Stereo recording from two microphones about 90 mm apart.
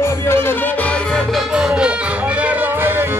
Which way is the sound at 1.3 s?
5° right (ahead or behind).